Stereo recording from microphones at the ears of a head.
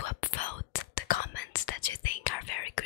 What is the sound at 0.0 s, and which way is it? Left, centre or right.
Whispering, left.